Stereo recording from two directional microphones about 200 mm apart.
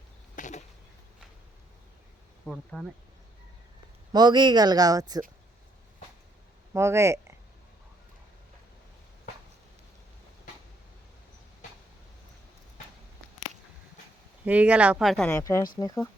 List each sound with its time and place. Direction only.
0.3 s a sound: 40° left (ahead or behind)
2.5 s speech: 10° left (ahead or behind)
4.1 s speech: 20° right (ahead or behind)
6.7 s speech: 15° right (ahead or behind)
14.4 s speech: 5° right (ahead or behind)
15.3 s speech: 15° left (ahead or behind)